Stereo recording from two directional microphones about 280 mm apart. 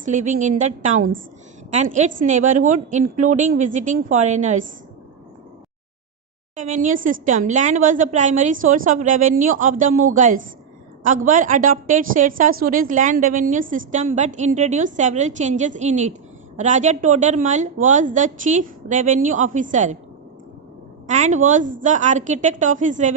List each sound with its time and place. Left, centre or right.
0.0 s a woman's voice: right
2.4 s a woman's voice: right
6.6 s a woman's voice: right
21.1 s a woman's voice: right